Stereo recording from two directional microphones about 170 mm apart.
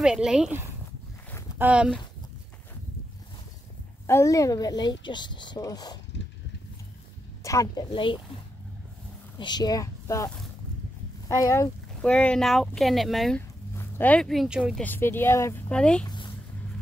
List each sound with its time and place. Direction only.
0.0 s speech: 5° right (ahead or behind)
4.1 s speech: 15° left (ahead or behind)
7.4 s speech: 20° left (ahead or behind)
9.4 s speech: 25° left (ahead or behind)
12.0 s speech: 5° left (ahead or behind)
13.7 s speech: 10° left (ahead or behind); by 14.8 s 5° right (ahead or behind)
14.8 s speech: 10° left (ahead or behind)